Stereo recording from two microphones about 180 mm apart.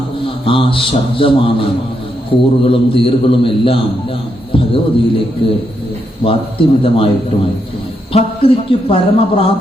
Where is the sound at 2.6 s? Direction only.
30° left (ahead or behind).